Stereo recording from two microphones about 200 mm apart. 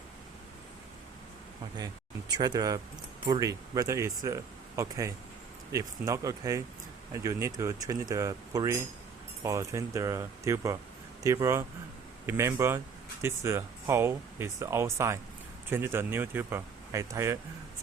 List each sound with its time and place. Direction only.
1.7 s speech: 20° right (ahead or behind)